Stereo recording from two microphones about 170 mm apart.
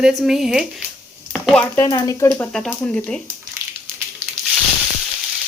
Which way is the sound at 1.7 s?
20° left (ahead or behind).